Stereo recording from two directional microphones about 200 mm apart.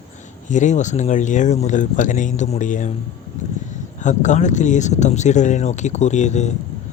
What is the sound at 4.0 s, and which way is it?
Speech, 35° left (ahead or behind).